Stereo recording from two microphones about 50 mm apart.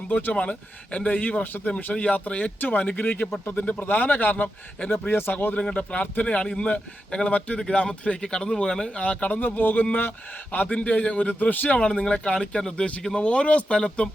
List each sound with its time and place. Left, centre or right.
0.1 s a man's voice: left
0.3 s a man's voice: left
4.9 s speech: left
5.5 s speech: left
6.2 s a man's voice: centre
9.0 s a man's voice: left
11.8 s speech: centre